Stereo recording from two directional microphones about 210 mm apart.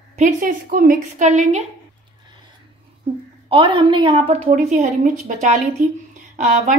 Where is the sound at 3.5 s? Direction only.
25° right (ahead or behind).